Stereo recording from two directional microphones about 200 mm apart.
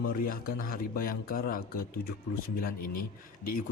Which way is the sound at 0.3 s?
45° left (ahead or behind).